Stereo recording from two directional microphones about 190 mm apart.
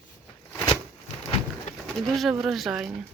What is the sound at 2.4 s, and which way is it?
Speech, centre (ahead or behind).